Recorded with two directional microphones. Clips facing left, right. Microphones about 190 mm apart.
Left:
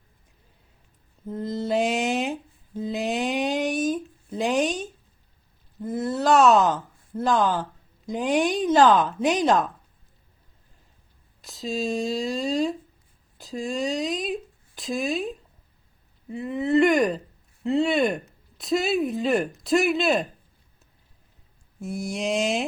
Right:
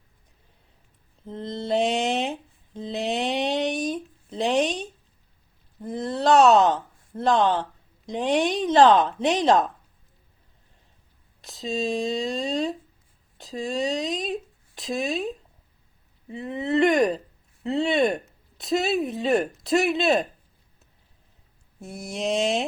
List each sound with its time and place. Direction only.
1.3 s mantra: 30° right (ahead or behind)
1.5 s mantra: 5° left (ahead or behind)
2.9 s a sound: centre (ahead or behind)
7.6 s a woman's voice: centre (ahead or behind)
11.4 s speech: centre (ahead or behind)
21.8 s speech: centre (ahead or behind)